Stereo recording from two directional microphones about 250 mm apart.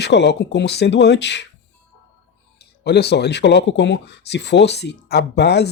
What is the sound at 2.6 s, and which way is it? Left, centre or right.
Speech, left.